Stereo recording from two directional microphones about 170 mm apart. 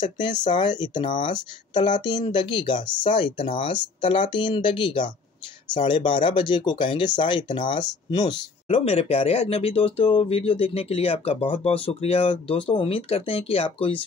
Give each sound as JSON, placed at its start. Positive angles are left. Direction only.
{"t": 0.0, "sound": "speech", "side_deg": 25}